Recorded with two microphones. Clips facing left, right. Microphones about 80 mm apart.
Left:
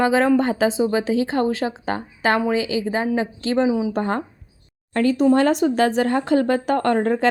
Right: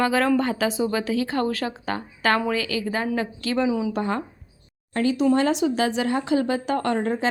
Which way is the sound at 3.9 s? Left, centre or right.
Left.